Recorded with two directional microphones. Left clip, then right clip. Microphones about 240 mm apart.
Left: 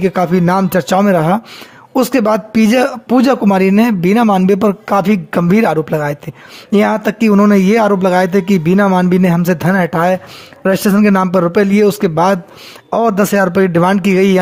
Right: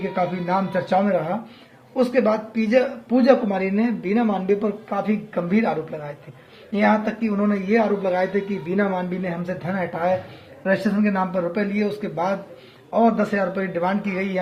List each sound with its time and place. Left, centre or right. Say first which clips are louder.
0.2 s speech: left 6 dB; left